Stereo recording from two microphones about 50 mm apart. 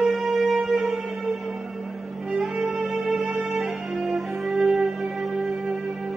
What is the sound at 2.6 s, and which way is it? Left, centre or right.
Music, centre.